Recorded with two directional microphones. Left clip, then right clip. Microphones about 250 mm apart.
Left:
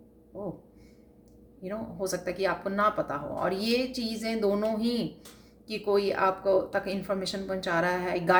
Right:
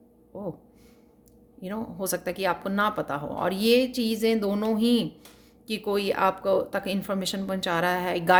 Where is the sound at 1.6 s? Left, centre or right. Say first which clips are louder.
Right 1 dB; right.